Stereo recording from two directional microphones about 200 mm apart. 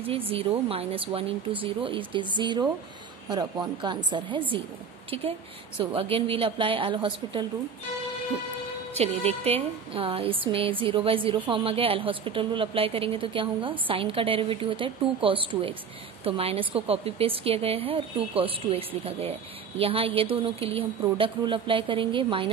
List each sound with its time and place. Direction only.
0.3 s a woman's voice: 30° right (ahead or behind)
8.9 s a woman's voice: 30° right (ahead or behind)